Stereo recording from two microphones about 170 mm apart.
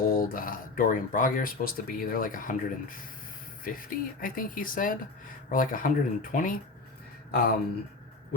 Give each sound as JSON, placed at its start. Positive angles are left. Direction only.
{"t": 0.0, "sound": "speech", "side_deg": 55}
{"t": 7.3, "sound": "speech", "side_deg": 65}